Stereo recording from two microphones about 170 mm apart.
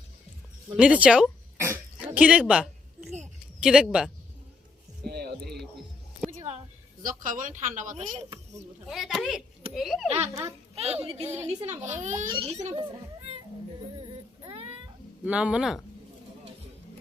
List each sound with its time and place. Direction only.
0.8 s oink: 5° right (ahead or behind)
1.7 s a sound: 10° right (ahead or behind)
3.6 s speech: 5° right (ahead or behind)
5.0 s music: 70° right (ahead or behind)
6.3 s a sound: 40° right (ahead or behind)
7.0 s speech: 50° right (ahead or behind)
8.9 s speech: centre (ahead or behind)
10.2 s a child's voice: 20° right (ahead or behind)
10.8 s speech: 35° right (ahead or behind)
12.3 s speech: 35° right (ahead or behind)
15.2 s speech: 5° right (ahead or behind)